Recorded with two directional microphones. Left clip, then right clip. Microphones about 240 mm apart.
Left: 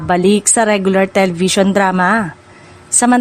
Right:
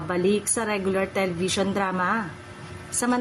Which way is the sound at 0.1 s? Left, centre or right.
Left.